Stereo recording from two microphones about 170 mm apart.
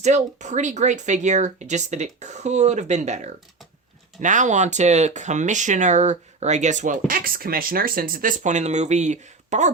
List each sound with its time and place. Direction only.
0.0 s speech: 45° right (ahead or behind)